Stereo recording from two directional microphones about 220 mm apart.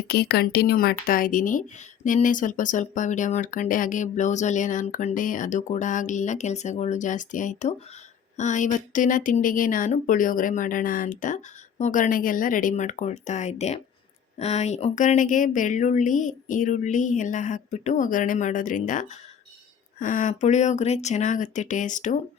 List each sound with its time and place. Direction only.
0.1 s speech: 45° left (ahead or behind)